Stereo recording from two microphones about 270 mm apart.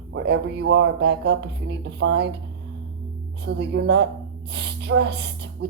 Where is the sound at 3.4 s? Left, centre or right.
Right.